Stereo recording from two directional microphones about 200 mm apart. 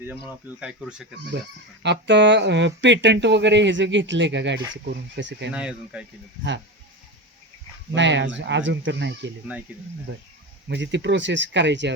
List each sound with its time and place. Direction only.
0.3 s speech: 5° right (ahead or behind)
1.8 s speech: 60° right (ahead or behind)
5.5 s speech: 5° right (ahead or behind)
7.9 s speech: 65° right (ahead or behind)
10.7 s speech: 60° right (ahead or behind)